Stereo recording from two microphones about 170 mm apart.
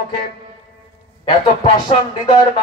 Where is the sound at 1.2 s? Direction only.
30° left (ahead or behind).